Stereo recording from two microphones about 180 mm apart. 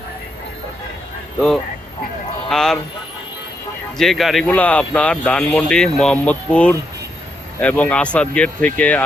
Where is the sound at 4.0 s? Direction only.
Centre (ahead or behind).